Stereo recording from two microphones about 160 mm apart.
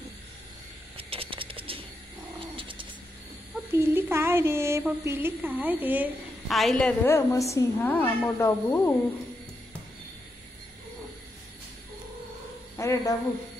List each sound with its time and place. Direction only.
0.9 s a sound: 35° right (ahead or behind)
2.5 s bird: 30° right (ahead or behind)
3.7 s a sound: 15° right (ahead or behind)
6.5 s a woman's voice: centre (ahead or behind)
7.1 s a woman's voice: 15° left (ahead or behind)
12.7 s speech: 20° left (ahead or behind)